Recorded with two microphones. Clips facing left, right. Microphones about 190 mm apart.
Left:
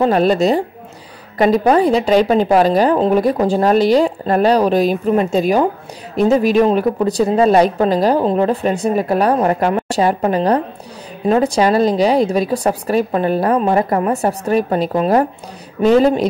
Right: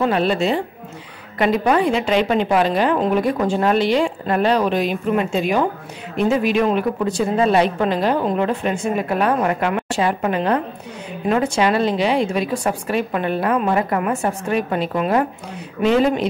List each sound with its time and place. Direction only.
0.0 s speech: 40° left (ahead or behind)